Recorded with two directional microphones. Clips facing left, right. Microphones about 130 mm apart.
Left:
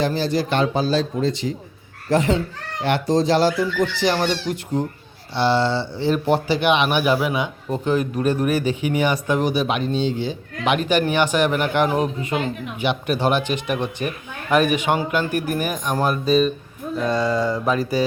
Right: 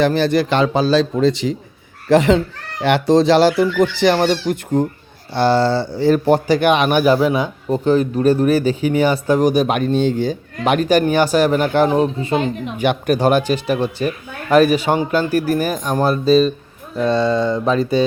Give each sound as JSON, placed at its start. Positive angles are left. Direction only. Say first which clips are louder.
{"t": 0.0, "sound": "a man's voice", "louder": "right 6 dB", "side_deg": -65}
{"t": 12.8, "sound": "speech", "louder": "right 5 dB", "side_deg": -45}